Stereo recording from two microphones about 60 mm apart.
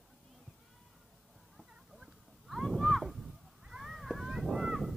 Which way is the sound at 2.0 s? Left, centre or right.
Centre.